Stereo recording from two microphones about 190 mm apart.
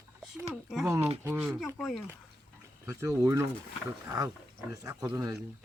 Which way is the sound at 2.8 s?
15° right (ahead or behind).